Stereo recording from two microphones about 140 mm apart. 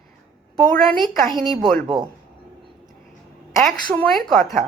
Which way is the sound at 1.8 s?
30° right (ahead or behind).